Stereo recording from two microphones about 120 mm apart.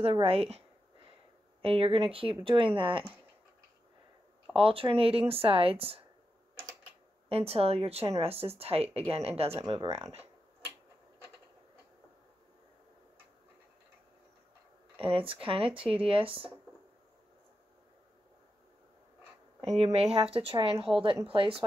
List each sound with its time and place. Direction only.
0.0 s speech: 50° right (ahead or behind)
4.6 s speech: 45° right (ahead or behind)
7.2 s speech: 55° right (ahead or behind)
9.7 s speech: 30° right (ahead or behind)
15.0 s speech: 50° right (ahead or behind)
19.6 s speech: 60° right (ahead or behind)